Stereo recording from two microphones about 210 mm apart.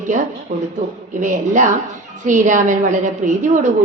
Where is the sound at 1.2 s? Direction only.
35° right (ahead or behind).